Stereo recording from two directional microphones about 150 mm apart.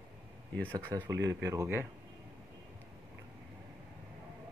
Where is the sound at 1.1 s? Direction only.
20° right (ahead or behind).